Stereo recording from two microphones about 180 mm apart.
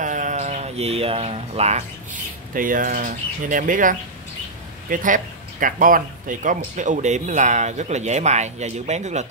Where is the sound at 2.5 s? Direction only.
50° right (ahead or behind).